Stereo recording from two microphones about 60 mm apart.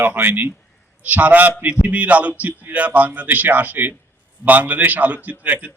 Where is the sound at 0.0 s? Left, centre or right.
Right.